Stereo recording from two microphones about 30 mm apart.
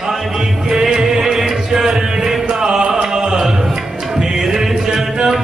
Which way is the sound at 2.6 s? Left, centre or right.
Right.